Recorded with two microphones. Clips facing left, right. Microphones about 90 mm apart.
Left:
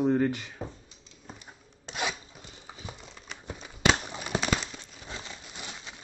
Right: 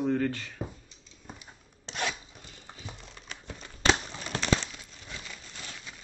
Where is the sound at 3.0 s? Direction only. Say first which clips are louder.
Left 1 dB; centre (ahead or behind).